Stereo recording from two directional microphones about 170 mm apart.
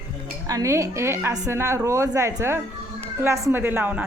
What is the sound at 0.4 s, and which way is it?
A woman's voice, 20° right (ahead or behind).